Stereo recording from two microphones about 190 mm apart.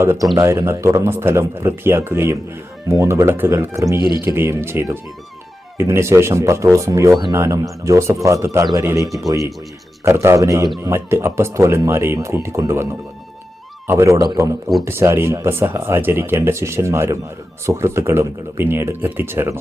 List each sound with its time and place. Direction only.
0.0 s speech: 15° right (ahead or behind)